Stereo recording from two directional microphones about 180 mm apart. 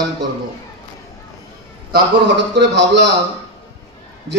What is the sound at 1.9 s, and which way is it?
A man's voice, 75° right (ahead or behind).